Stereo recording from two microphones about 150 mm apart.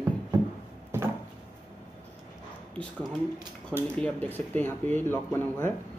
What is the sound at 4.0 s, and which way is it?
Speech, 10° left (ahead or behind).